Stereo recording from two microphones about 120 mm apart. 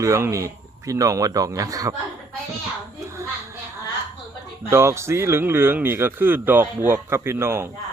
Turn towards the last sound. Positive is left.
turn(degrees=-20)  # may be behind; listen again after turning